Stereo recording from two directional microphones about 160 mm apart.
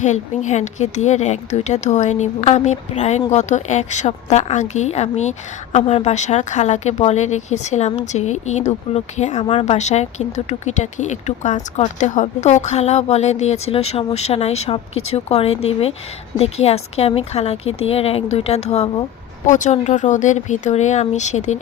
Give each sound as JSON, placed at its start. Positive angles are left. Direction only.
{"t": 0.0, "sound": "speech", "side_deg": 45}
{"t": 9.5, "sound": "speech", "side_deg": 35}
{"t": 9.7, "sound": "speech", "side_deg": 45}